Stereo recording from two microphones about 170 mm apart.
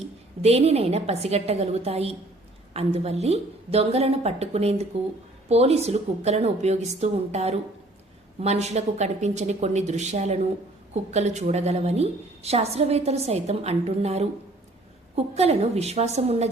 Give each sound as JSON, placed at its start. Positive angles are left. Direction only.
{"t": 0.4, "sound": "a woman's voice", "side_deg": -40}